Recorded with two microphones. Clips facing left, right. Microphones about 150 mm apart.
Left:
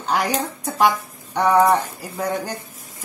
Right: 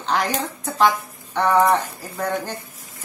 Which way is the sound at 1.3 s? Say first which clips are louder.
Left 1 dB; 10° left (ahead or behind).